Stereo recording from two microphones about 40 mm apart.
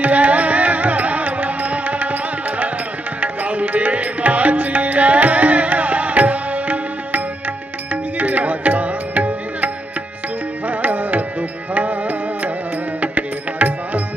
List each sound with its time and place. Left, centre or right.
0.0 s music: right
3.2 s music: right
8.2 s music: right
10.7 s music: right